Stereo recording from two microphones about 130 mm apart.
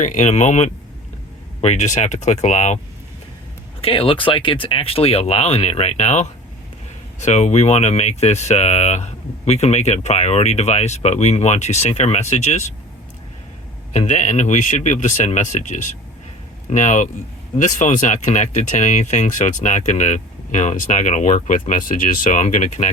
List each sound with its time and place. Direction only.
0.0 s speech: 70° left (ahead or behind)
3.8 s speech: 45° left (ahead or behind); by 12.7 s 60° left (ahead or behind)
13.9 s speech: 60° left (ahead or behind); by 22.9 s 80° left